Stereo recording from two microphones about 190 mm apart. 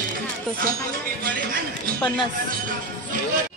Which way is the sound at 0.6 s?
50° right (ahead or behind).